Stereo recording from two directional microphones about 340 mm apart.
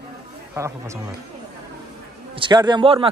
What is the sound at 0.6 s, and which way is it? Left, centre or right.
Speech, centre.